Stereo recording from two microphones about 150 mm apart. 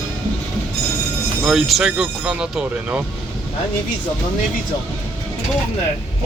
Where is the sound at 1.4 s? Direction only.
5° right (ahead or behind).